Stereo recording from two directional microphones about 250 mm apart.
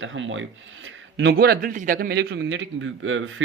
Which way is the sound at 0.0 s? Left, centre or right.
Right.